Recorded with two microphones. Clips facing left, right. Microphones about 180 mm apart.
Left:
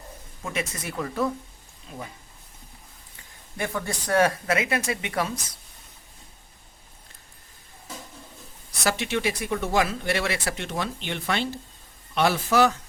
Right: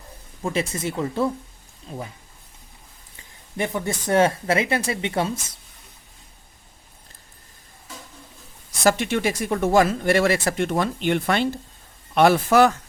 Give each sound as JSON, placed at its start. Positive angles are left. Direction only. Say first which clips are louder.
{"t": 0.4, "sound": "speech", "louder": "right 6 dB", "side_deg": -30}
{"t": 3.6, "sound": "speech", "louder": "right 4 dB", "side_deg": -20}
{"t": 8.8, "sound": "speech", "louder": "right 5 dB", "side_deg": -50}